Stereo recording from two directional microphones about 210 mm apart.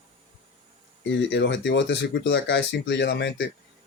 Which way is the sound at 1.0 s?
55° left (ahead or behind).